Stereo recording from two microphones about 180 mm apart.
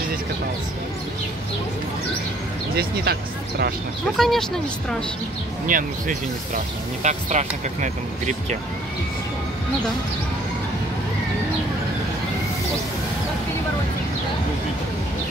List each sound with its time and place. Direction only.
2.7 s speech: 60° right (ahead or behind)
4.2 s speech: centre (ahead or behind)
5.7 s speech: 50° right (ahead or behind)